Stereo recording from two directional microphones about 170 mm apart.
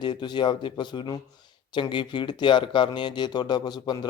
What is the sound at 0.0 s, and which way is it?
A man's voice, 25° left (ahead or behind).